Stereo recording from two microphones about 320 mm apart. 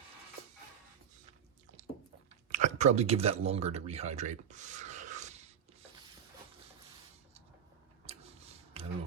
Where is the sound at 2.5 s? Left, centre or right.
Right.